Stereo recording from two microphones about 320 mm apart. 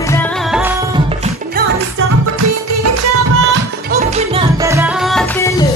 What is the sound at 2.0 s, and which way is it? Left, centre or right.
Music, right.